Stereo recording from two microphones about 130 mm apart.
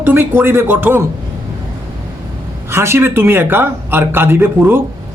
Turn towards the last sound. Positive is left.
turn(degrees=-15)  # may be behind; listen again after turning